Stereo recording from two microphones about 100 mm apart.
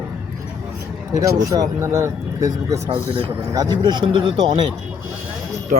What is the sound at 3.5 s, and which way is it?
Speech, 45° right (ahead or behind).